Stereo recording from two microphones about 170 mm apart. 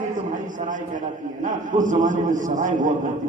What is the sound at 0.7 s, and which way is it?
A man's voice, 50° right (ahead or behind).